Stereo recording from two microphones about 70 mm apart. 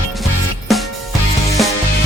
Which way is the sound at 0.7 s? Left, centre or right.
Centre.